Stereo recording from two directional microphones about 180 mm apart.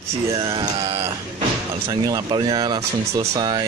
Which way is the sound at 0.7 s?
30° right (ahead or behind).